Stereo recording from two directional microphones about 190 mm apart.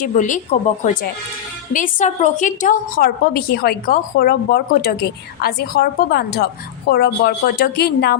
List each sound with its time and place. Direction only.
0.0 s speech: 40° left (ahead or behind)
1.7 s a woman's voice: 40° left (ahead or behind)